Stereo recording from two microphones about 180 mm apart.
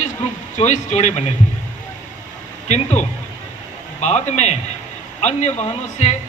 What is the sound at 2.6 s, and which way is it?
A man's voice, 40° left (ahead or behind).